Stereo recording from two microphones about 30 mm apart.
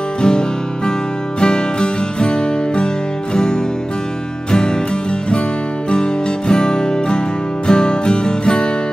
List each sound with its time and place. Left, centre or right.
0.2 s music: left
5.9 s music: left